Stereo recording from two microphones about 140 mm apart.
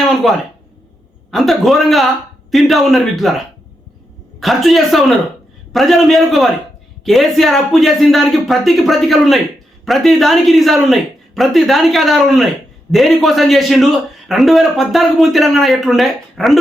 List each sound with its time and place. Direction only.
0.2 s a man's voice: centre (ahead or behind)